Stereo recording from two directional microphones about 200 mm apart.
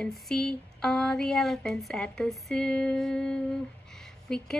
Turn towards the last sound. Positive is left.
turn(degrees=5)  # may be behind; listen again after turning